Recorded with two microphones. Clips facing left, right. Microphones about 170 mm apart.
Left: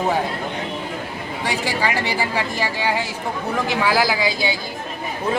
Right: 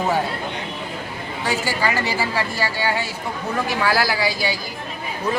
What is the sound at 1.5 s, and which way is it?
A woman's voice, 15° left (ahead or behind).